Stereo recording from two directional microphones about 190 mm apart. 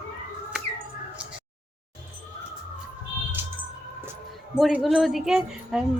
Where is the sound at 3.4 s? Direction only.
10° right (ahead or behind).